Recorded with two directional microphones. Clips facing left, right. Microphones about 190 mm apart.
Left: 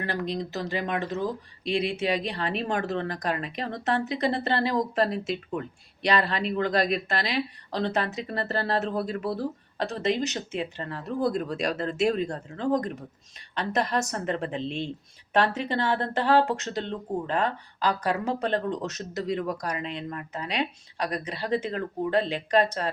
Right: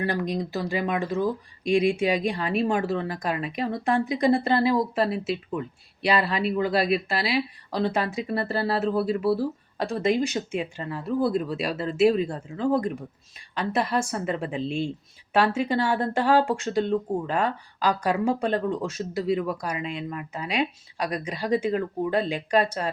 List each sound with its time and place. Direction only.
0.0 s speech: 15° right (ahead or behind)